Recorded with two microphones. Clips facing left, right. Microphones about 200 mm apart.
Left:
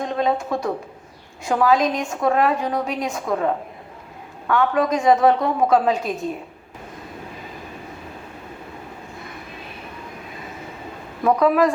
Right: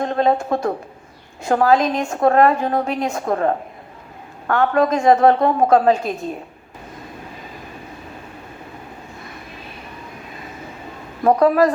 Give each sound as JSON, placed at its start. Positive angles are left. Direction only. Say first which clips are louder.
{"t": 0.0, "sound": "a woman's voice", "louder": "right 4 dB", "side_deg": -50}
{"t": 11.2, "sound": "a woman's voice", "louder": "right 3 dB", "side_deg": -45}